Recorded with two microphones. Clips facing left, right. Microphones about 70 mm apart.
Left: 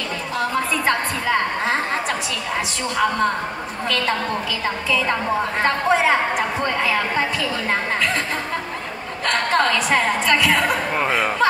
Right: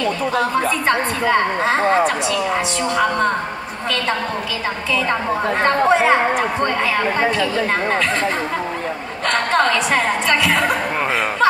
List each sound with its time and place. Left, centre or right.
0.8 s a woman's voice: centre
5.6 s a woman's voice: centre
9.3 s a woman's voice: centre